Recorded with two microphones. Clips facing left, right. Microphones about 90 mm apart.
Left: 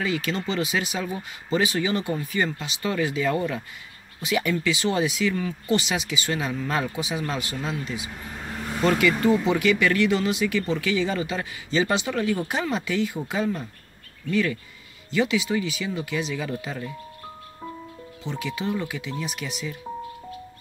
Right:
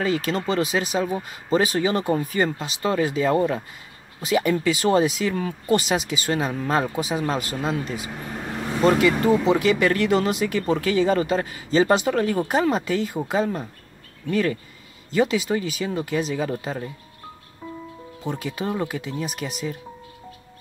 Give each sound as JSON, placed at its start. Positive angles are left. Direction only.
{"t": 0.0, "sound": "speech", "side_deg": -40}
{"t": 18.2, "sound": "speech", "side_deg": -45}